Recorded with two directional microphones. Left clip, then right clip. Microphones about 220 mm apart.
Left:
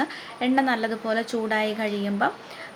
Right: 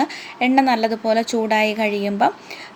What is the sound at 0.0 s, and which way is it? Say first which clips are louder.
A woman's voice: right 6 dB; 30° right (ahead or behind).